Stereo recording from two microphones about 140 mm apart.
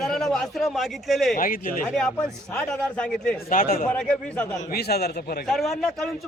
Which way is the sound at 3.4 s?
80° left.